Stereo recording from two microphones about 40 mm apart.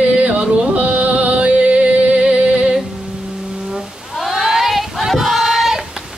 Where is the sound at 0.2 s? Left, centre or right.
Right.